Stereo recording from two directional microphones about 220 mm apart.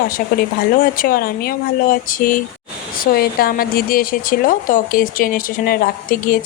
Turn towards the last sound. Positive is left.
turn(degrees=40)  # may be behind; listen again after turning